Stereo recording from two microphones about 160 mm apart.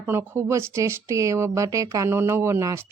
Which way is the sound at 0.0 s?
15° right (ahead or behind).